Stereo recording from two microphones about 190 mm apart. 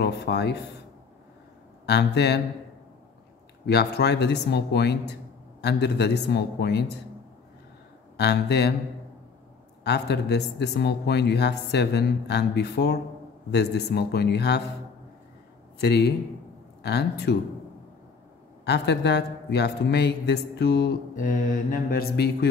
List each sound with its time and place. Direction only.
0.0 s speech: 60° left (ahead or behind)
1.9 s speech: 60° left (ahead or behind)
3.6 s speech: 60° left (ahead or behind)
8.2 s speech: 60° left (ahead or behind)
9.8 s speech: 60° left (ahead or behind)
15.8 s speech: 60° left (ahead or behind)
18.6 s speech: 60° left (ahead or behind)